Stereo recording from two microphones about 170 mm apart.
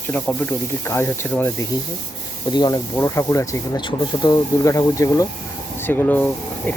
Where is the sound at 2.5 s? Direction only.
25° left (ahead or behind).